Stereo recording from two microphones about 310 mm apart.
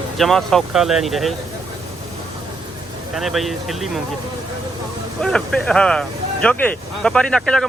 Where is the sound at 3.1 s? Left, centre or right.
Centre.